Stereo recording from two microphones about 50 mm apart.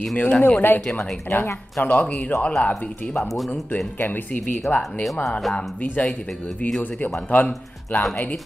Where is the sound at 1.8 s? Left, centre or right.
Left.